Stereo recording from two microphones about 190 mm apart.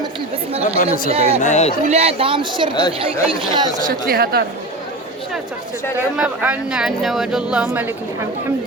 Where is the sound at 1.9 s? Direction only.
30° right (ahead or behind).